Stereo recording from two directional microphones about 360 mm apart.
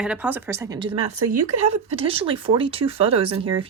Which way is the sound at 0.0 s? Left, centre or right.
Centre.